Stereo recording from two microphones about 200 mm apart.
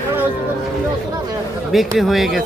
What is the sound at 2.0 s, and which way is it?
Speech, centre (ahead or behind).